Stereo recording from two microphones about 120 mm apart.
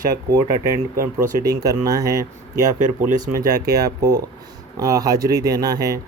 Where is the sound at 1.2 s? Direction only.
30° right (ahead or behind).